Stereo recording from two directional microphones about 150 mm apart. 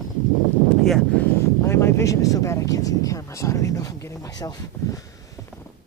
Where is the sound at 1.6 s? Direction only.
15° left (ahead or behind).